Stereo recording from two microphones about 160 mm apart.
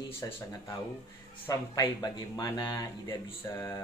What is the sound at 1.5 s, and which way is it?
Speech, 20° left (ahead or behind).